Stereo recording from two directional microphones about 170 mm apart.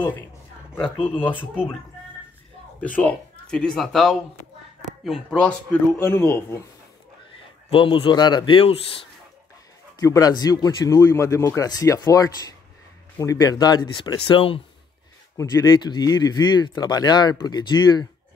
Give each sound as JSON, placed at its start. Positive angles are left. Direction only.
{"t": 3.0, "sound": "speech", "side_deg": 5}
{"t": 7.7, "sound": "a man's voice", "side_deg": 30}
{"t": 9.9, "sound": "speech", "side_deg": 20}
{"t": 15.3, "sound": "speech", "side_deg": 20}